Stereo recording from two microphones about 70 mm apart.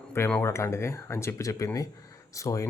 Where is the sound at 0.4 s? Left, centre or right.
Left.